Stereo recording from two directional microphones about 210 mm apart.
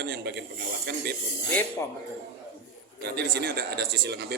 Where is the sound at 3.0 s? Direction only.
50° right (ahead or behind).